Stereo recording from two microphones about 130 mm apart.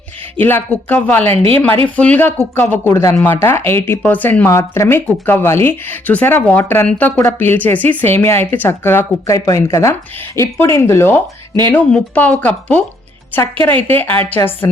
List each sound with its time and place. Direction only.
0.3 s speech: 15° left (ahead or behind)